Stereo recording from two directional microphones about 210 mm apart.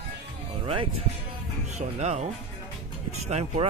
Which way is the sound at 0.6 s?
25° right (ahead or behind).